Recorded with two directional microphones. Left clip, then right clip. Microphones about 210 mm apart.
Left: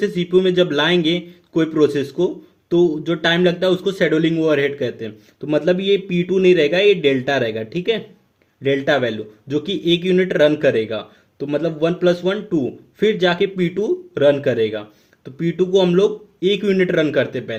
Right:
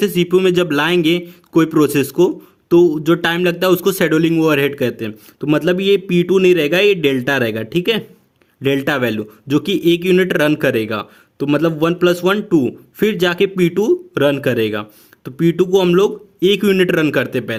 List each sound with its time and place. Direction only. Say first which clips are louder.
0.0 s a man's voice: right 3 dB; 50° right (ahead or behind)